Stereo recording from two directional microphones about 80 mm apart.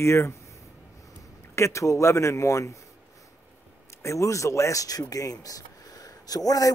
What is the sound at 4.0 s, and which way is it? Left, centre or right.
Speech, left.